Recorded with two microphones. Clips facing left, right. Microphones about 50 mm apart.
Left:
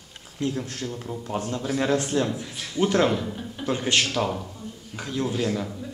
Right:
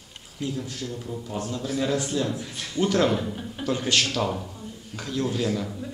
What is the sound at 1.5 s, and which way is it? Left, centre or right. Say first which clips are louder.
Speech: left 2 dB; left.